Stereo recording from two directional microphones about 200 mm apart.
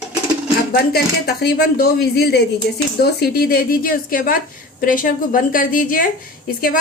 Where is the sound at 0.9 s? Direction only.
50° left (ahead or behind).